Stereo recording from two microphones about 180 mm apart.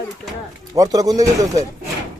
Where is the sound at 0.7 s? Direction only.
20° right (ahead or behind).